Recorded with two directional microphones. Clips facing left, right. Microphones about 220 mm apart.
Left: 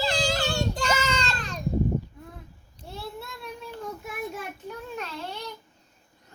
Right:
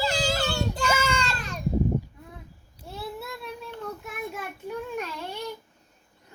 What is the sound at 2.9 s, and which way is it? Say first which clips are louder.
Child singing: right 2 dB; centre (ahead or behind).